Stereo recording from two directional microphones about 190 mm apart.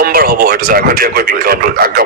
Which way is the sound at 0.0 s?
50° right (ahead or behind).